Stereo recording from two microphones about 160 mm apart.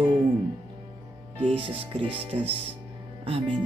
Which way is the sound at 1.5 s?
35° right (ahead or behind).